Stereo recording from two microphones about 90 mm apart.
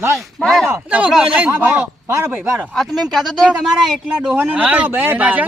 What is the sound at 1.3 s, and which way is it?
Speech, 15° right (ahead or behind).